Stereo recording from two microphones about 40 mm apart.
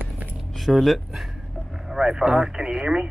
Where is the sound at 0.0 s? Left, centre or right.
Right.